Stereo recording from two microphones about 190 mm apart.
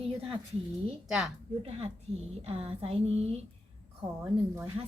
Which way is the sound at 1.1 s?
Centre (ahead or behind).